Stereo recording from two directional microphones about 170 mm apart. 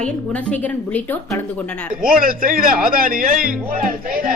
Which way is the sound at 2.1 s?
60° right (ahead or behind).